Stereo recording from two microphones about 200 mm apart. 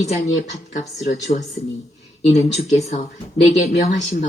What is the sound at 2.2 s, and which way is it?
Speech, 35° left (ahead or behind).